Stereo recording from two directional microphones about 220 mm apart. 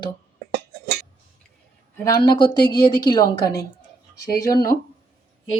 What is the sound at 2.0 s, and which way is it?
Speech, 15° left (ahead or behind).